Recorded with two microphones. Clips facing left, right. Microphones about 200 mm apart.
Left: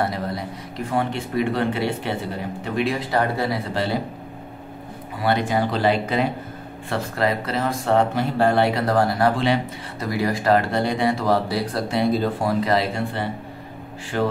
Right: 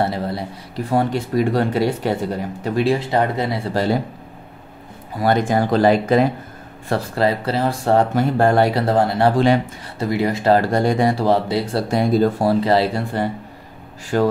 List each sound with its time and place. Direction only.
0.0 s a man's voice: 30° right (ahead or behind)
3.7 s speech: 45° right (ahead or behind)
5.2 s speech: 45° right (ahead or behind)
6.9 s a man's voice: 30° right (ahead or behind)
8.1 s speech: 45° right (ahead or behind)
8.8 s speech: 25° right (ahead or behind)
10.7 s speech: 45° right (ahead or behind)
11.2 s speech: 25° right (ahead or behind)
11.9 s speech: 45° right (ahead or behind)
12.4 s a man's voice: 30° right (ahead or behind)